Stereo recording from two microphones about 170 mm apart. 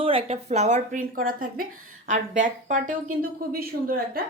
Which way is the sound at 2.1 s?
45° right (ahead or behind).